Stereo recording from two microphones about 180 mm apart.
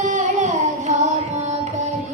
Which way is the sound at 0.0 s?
45° right (ahead or behind).